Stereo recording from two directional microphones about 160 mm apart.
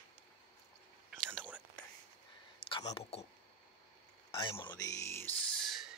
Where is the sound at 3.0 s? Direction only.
40° left (ahead or behind).